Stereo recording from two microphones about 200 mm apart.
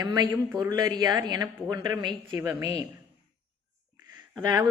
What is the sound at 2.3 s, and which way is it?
Speech, 10° right (ahead or behind).